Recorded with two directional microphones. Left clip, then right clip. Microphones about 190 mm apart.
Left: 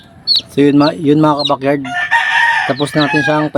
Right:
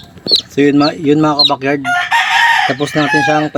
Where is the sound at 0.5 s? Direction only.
20° left (ahead or behind).